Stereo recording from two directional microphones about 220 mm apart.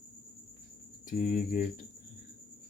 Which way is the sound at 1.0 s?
40° left (ahead or behind).